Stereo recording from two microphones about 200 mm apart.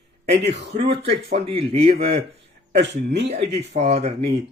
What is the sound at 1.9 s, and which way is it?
Speech, 55° right (ahead or behind).